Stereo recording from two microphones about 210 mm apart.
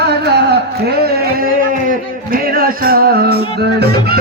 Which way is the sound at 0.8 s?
45° right (ahead or behind).